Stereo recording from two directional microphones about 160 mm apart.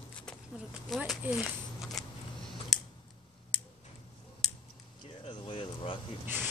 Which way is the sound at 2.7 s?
Centre (ahead or behind).